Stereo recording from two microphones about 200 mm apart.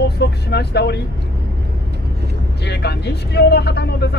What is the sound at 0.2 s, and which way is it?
Speech, 55° left (ahead or behind).